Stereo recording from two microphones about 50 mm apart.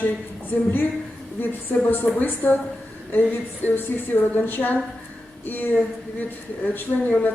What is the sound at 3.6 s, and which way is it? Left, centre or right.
A woman's voice, left.